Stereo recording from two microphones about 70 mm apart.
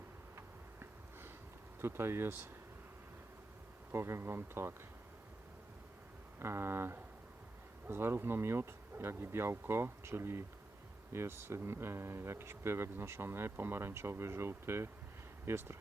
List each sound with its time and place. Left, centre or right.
0.3 s a sound: right
1.8 s speech: right
3.9 s speech: right
6.4 s speech: right